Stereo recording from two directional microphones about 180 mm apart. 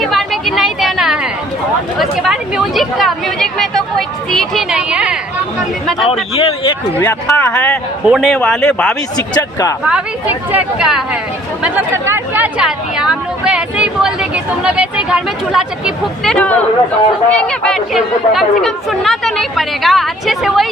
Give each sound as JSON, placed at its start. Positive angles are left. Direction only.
{"t": 0.1, "sound": "a sound", "side_deg": 0}
{"t": 2.0, "sound": "speech", "side_deg": 0}
{"t": 6.3, "sound": "a man's voice", "side_deg": 30}
{"t": 7.0, "sound": "a man's voice", "side_deg": 15}
{"t": 8.0, "sound": "a man's voice", "side_deg": 0}
{"t": 9.1, "sound": "speech", "side_deg": 20}
{"t": 9.8, "sound": "speech", "side_deg": -10}